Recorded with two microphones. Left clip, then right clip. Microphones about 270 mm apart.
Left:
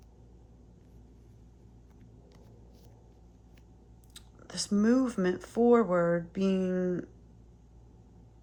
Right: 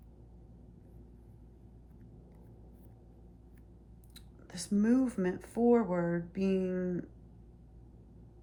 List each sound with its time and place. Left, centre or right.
4.1 s speech: centre